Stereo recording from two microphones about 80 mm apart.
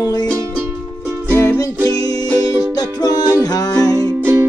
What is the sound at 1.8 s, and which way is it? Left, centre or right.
Music, left.